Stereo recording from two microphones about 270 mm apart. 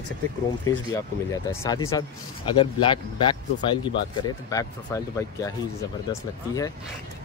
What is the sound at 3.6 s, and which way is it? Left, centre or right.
Speech, centre.